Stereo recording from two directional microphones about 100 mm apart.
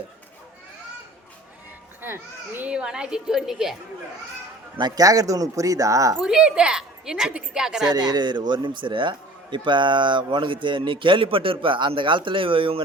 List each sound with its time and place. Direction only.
2.0 s a child's voice: 20° right (ahead or behind)
2.6 s a woman's voice: 10° right (ahead or behind)
4.8 s speech: 40° right (ahead or behind)
6.2 s a woman's voice: 5° right (ahead or behind)
8.1 s a man's voice: 45° right (ahead or behind); by 12.8 s 60° right (ahead or behind)